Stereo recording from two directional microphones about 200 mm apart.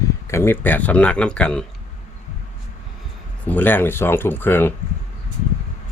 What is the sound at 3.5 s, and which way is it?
Speech, 10° left (ahead or behind).